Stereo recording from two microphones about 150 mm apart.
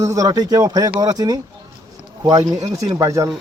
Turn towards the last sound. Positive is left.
turn(degrees=-20)  # may be behind; listen again after turning